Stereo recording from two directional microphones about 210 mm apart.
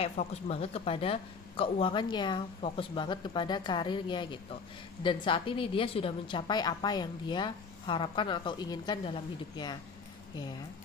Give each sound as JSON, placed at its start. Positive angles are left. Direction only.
{"t": 0.0, "sound": "speech", "side_deg": 30}